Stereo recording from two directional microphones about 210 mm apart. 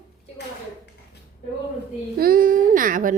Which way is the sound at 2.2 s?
45° right (ahead or behind).